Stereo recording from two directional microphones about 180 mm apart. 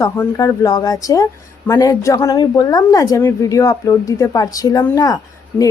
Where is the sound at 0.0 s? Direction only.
20° left (ahead or behind).